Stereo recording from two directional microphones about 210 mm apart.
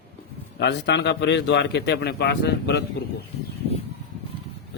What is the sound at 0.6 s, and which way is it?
A man's voice, 55° left (ahead or behind).